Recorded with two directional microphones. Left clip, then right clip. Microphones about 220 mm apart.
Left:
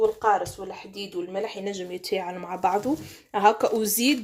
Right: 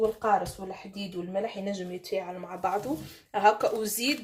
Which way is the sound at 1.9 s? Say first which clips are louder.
Left 4 dB; 40° left (ahead or behind).